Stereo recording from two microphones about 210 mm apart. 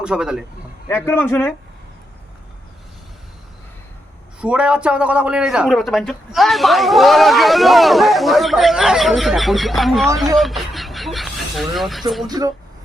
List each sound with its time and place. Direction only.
0.0 s a man's voice: 5° right (ahead or behind)
0.9 s speech: 10° left (ahead or behind)
4.4 s a man's voice: 5° right (ahead or behind)
10.3 s a sound: centre (ahead or behind)
12.3 s speech: 15° right (ahead or behind)